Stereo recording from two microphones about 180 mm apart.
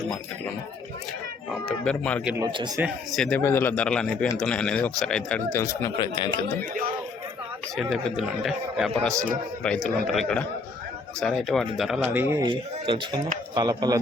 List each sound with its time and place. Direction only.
1.5 s speech: centre (ahead or behind)
2.4 s speech: 25° right (ahead or behind)
2.8 s speech: centre (ahead or behind)
5.5 s speech: 15° left (ahead or behind)
6.6 s speech: 50° right (ahead or behind)
7.8 s speech: centre (ahead or behind)
12.4 s speech: 25° right (ahead or behind)